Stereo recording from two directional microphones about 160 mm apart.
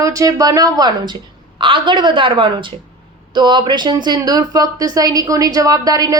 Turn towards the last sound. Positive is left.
turn(degrees=-20)  # may be behind; listen again after turning